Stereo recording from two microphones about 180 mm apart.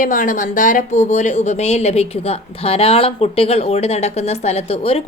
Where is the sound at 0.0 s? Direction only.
50° left (ahead or behind).